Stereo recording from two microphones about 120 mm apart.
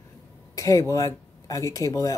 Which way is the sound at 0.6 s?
25° left (ahead or behind).